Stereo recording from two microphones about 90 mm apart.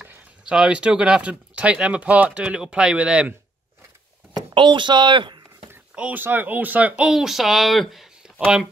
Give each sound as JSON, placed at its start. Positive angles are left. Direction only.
{"t": 0.5, "sound": "speech", "side_deg": -10}
{"t": 4.3, "sound": "a sound", "side_deg": -60}
{"t": 5.9, "sound": "speech", "side_deg": -20}
{"t": 7.1, "sound": "speech", "side_deg": -5}